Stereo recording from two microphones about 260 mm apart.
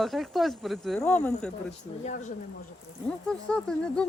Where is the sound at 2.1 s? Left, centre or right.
Left.